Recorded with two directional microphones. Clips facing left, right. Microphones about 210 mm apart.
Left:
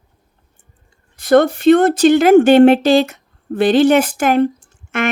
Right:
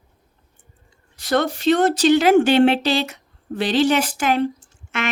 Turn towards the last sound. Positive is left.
turn(degrees=55)  # may be behind; listen again after turning